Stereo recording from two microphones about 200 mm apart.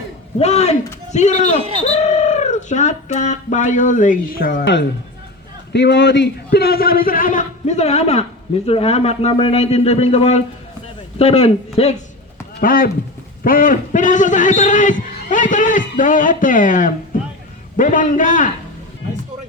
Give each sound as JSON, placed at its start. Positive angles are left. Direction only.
{"t": 0.3, "sound": "a man's voice", "side_deg": 30}
{"t": 5.7, "sound": "a man's voice", "side_deg": 60}
{"t": 12.5, "sound": "a man's voice", "side_deg": 45}